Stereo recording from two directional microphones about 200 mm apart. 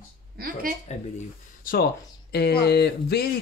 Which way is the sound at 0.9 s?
35° left (ahead or behind).